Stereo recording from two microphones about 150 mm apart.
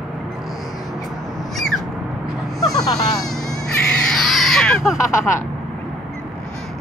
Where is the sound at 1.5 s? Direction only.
Centre (ahead or behind).